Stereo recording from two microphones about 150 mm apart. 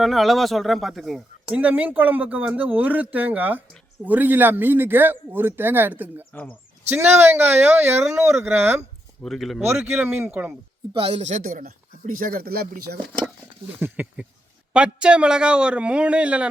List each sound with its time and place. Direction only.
0.0 s speech: centre (ahead or behind); by 8.8 s 15° right (ahead or behind)
9.2 s speech: centre (ahead or behind)
9.6 s speech: 15° right (ahead or behind)
10.9 s speech: 40° right (ahead or behind); by 13.0 s 90° right
13.7 s speech: 10° right (ahead or behind)